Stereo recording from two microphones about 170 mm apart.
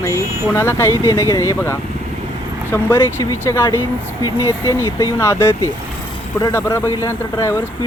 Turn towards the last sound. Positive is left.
turn(degrees=15)  # may be behind; listen again after turning